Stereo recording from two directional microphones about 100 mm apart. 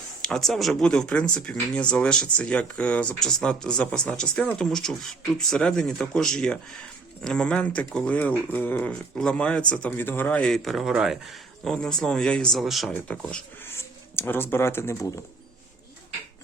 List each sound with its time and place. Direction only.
0.2 s speech: 5° left (ahead or behind)
9.1 s speech: 10° left (ahead or behind)
12.9 s speech: 15° left (ahead or behind)